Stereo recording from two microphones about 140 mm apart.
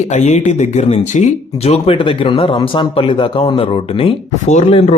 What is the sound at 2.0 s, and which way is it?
Speech, 40° left (ahead or behind).